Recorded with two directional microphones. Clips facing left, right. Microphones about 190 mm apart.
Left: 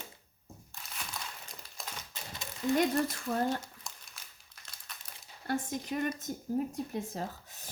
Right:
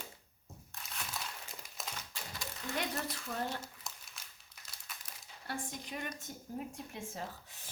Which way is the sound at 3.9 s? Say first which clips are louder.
Even; centre (ahead or behind).